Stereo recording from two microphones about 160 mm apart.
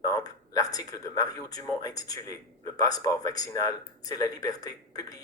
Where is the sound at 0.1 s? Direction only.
25° left (ahead or behind).